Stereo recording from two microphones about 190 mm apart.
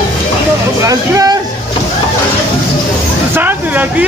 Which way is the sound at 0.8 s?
20° right (ahead or behind).